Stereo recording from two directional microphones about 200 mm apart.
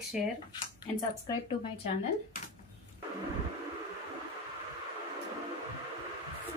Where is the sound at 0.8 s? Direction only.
20° left (ahead or behind).